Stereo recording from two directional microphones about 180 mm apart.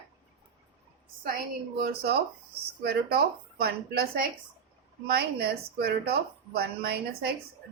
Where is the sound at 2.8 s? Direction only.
60° right (ahead or behind).